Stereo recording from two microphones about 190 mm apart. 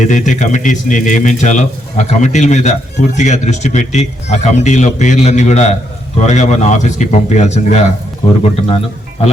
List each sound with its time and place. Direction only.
0.0 s speech: 40° left (ahead or behind)